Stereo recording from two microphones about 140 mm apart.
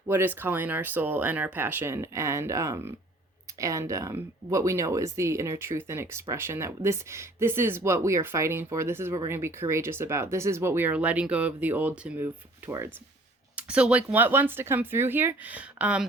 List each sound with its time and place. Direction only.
0.1 s speech: 15° right (ahead or behind)